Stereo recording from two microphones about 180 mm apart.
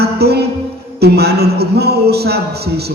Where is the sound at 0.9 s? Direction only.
65° right (ahead or behind).